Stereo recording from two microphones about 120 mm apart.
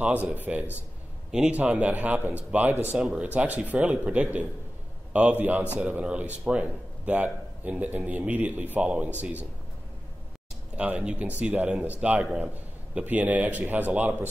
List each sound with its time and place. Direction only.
0.0 s a man's voice: 10° right (ahead or behind)
3.0 s a man's voice: 5° right (ahead or behind)
10.8 s a man's voice: 10° right (ahead or behind)